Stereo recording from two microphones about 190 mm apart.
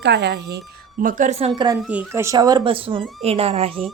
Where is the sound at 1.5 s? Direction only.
25° right (ahead or behind).